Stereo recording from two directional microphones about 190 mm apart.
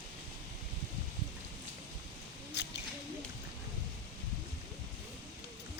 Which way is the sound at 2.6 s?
65° left (ahead or behind).